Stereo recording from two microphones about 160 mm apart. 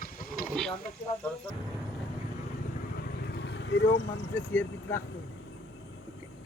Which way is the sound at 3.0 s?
75° left (ahead or behind).